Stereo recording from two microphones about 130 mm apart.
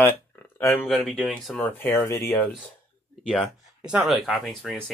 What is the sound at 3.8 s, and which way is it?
Speech, 5° right (ahead or behind).